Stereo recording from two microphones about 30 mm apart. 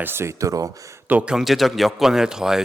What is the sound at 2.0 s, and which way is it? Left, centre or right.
Speech, centre.